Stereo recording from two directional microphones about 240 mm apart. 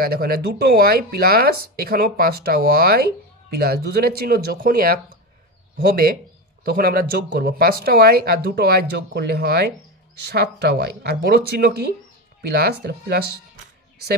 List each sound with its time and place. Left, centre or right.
0.0 s speech: right